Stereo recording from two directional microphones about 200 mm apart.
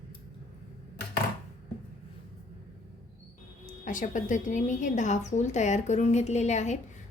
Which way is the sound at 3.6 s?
40° left (ahead or behind).